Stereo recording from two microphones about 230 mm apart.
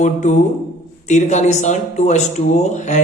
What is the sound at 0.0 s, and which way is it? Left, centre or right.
Speech, left.